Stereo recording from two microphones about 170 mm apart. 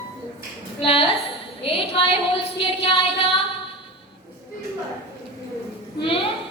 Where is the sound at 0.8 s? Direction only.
35° left (ahead or behind).